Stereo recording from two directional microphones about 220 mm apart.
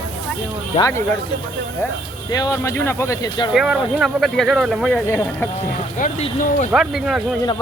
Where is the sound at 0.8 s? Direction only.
15° left (ahead or behind).